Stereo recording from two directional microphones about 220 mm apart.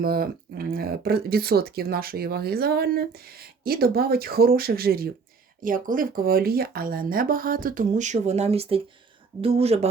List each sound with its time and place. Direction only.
0.0 s a woman's voice: 45° right (ahead or behind); by 9.9 s 30° right (ahead or behind)